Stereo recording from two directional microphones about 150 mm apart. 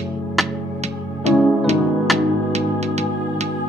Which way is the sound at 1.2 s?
45° right (ahead or behind).